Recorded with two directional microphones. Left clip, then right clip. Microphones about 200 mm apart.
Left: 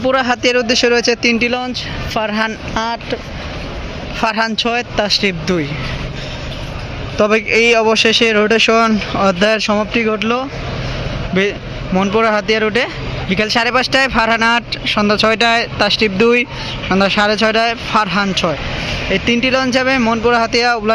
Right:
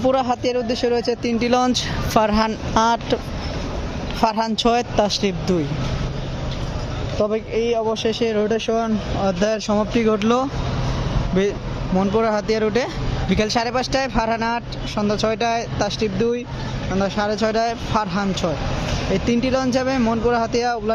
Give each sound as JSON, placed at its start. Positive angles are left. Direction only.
{"t": 0.1, "sound": "speech", "side_deg": 0}
{"t": 1.5, "sound": "speech", "side_deg": -30}
{"t": 2.2, "sound": "speech", "side_deg": -15}
{"t": 4.3, "sound": "speech", "side_deg": -10}
{"t": 7.3, "sound": "speech", "side_deg": 5}
{"t": 11.9, "sound": "speech", "side_deg": 0}